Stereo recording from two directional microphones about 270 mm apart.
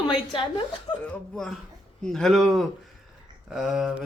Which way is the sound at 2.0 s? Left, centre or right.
Centre.